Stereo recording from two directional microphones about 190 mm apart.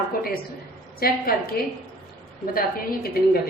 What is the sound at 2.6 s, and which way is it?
Speech, 50° left (ahead or behind).